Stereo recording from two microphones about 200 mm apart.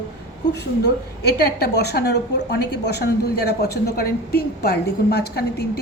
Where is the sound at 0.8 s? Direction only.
50° left (ahead or behind).